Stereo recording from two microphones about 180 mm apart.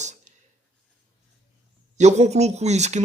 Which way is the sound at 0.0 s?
40° right (ahead or behind).